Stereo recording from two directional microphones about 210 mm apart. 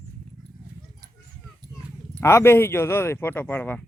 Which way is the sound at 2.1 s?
10° left (ahead or behind).